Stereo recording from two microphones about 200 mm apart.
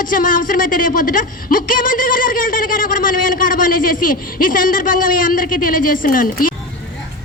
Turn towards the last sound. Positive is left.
turn(degrees=45)  # may be behind; listen again after turning